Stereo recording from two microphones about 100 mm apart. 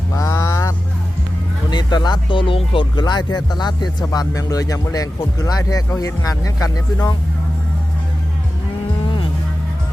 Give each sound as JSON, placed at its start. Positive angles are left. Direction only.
{"t": 0.1, "sound": "vehicle", "side_deg": 35}
{"t": 1.7, "sound": "speech", "side_deg": 45}